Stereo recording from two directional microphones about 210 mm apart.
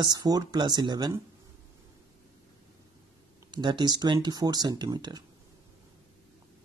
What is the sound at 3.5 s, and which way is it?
Speech, 20° right (ahead or behind).